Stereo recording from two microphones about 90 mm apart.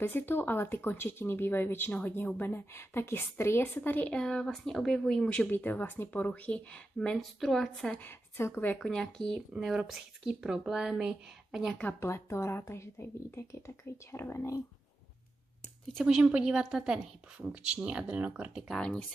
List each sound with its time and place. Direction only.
0.0 s speech: 25° left (ahead or behind); by 8.0 s 5° left (ahead or behind)
8.0 s a woman's voice: 25° left (ahead or behind)
8.8 s speech: 10° left (ahead or behind)
9.5 s speech: 5° right (ahead or behind)
12.0 s speech: 30° left (ahead or behind)
15.9 s speech: centre (ahead or behind)
18.7 s speech: 10° left (ahead or behind)